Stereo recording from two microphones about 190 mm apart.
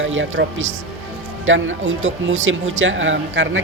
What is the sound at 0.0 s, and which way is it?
Speech, 85° right.